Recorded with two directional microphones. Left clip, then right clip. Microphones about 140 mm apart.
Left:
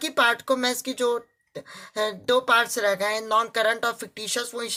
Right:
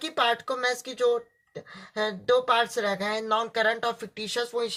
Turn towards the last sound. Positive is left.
turn(degrees=20)  # may be behind; listen again after turning